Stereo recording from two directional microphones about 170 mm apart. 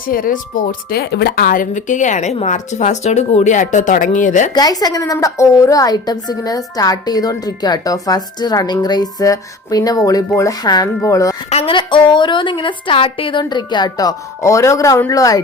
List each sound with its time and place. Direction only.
0.1 s speech: 55° left (ahead or behind)
4.5 s a woman's voice: 20° left (ahead or behind)
11.4 s a woman's voice: 35° left (ahead or behind); by 15.4 s 20° left (ahead or behind)